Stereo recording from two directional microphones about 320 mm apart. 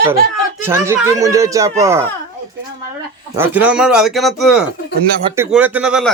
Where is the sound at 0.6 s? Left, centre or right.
Centre.